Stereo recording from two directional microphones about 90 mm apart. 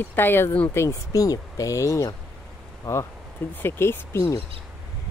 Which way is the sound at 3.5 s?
25° left (ahead or behind).